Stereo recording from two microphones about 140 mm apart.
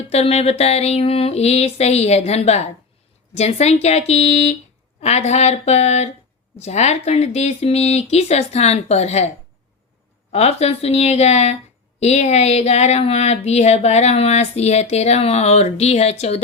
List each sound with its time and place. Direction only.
0.1 s speech: 45° left (ahead or behind)
10.3 s speech: 50° left (ahead or behind)